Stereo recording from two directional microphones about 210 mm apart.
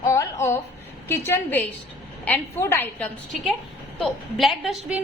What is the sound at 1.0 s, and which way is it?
A woman's voice, 10° left (ahead or behind).